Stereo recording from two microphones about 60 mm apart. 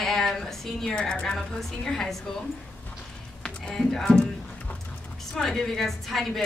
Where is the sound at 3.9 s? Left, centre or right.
Centre.